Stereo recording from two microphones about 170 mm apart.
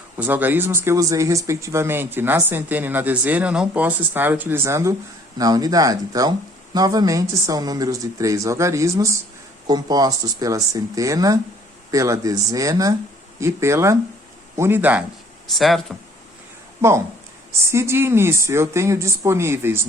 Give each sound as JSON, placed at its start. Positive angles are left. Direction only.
{"t": 0.2, "sound": "speech", "side_deg": -10}
{"t": 15.4, "sound": "speech", "side_deg": 0}
{"t": 17.6, "sound": "speech", "side_deg": -15}